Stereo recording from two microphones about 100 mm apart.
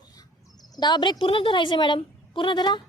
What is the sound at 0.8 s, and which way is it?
Speech, 50° left (ahead or behind).